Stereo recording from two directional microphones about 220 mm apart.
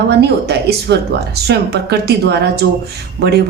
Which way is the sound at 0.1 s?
45° right (ahead or behind).